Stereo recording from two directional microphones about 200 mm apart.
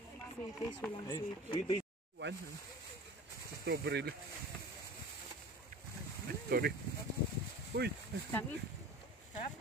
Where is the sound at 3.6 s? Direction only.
55° right (ahead or behind).